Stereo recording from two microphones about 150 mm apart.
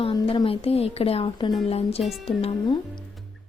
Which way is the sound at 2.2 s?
40° left (ahead or behind).